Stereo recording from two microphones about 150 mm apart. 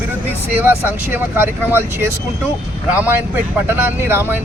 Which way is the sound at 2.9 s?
15° right (ahead or behind).